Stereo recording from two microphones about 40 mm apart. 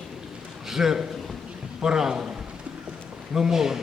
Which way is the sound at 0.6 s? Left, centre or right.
Centre.